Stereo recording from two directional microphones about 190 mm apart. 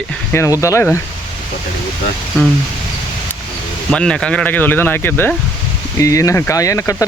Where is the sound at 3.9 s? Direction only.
5° left (ahead or behind).